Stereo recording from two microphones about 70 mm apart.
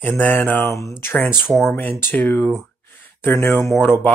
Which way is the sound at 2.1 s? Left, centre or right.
Left.